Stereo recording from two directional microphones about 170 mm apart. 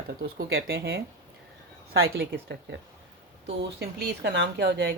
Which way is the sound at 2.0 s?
80° right.